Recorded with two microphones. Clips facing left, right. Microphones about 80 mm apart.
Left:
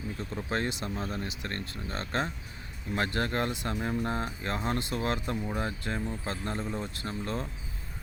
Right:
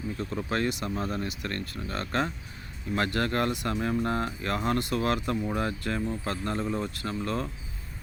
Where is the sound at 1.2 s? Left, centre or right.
Left.